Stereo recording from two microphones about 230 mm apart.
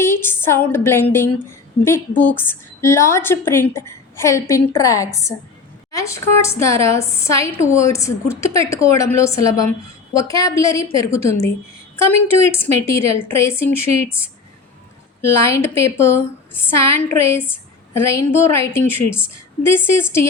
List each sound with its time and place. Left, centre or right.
0.0 s a woman's voice: centre
15.2 s a woman's voice: centre